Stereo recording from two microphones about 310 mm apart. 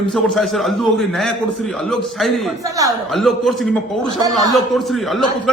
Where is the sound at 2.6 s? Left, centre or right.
Centre.